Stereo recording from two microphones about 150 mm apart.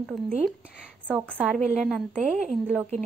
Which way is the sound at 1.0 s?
10° right (ahead or behind).